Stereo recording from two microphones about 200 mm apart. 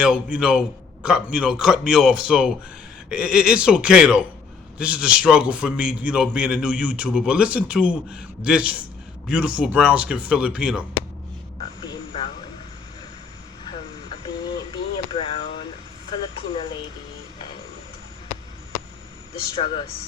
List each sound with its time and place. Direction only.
0.0 s a man's voice: 5° right (ahead or behind)
11.6 s vehicle: 25° left (ahead or behind)
14.7 s a sound: 25° left (ahead or behind)
19.4 s speech: 25° left (ahead or behind)